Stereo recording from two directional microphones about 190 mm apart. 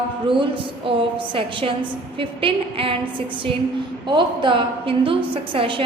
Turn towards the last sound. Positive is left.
turn(degrees=-30)  # may be behind; listen again after turning